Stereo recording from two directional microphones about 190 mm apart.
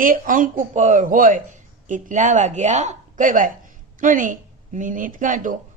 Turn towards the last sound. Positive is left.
turn(degrees=-45)  # may be behind; listen again after turning